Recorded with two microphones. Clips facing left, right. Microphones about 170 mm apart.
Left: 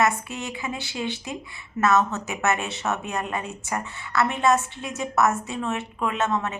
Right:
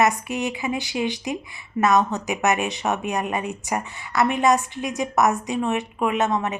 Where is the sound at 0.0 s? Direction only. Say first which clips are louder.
Right 3 dB; 15° right (ahead or behind).